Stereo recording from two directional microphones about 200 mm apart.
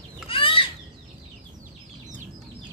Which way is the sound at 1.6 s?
40° right (ahead or behind).